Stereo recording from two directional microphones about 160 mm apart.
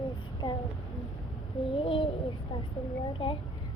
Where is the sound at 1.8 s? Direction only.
35° left (ahead or behind).